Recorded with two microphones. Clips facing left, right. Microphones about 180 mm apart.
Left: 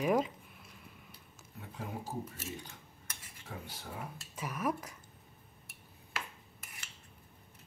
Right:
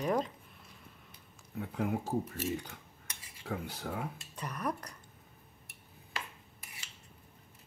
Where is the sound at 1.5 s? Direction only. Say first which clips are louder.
Right 9 dB; 65° right (ahead or behind).